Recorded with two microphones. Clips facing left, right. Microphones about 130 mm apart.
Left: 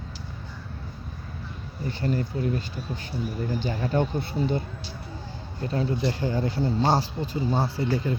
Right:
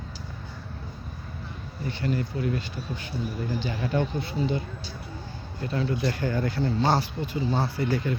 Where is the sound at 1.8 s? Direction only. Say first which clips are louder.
Left 1 dB; 40° left (ahead or behind).